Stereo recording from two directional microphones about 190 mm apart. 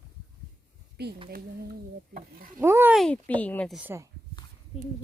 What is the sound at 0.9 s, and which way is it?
Speech, 60° right (ahead or behind).